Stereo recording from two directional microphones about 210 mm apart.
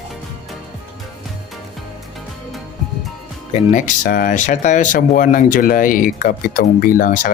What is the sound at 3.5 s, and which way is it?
Speech, 35° left (ahead or behind).